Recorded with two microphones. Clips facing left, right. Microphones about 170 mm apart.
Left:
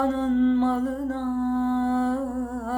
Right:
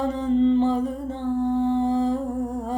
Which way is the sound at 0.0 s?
15° right (ahead or behind).